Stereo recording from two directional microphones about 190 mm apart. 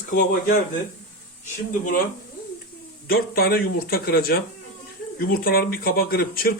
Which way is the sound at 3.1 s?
55° left (ahead or behind).